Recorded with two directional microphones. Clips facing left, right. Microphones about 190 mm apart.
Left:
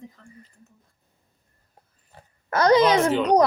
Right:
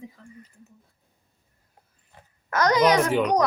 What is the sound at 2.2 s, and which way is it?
Oink, 30° left (ahead or behind).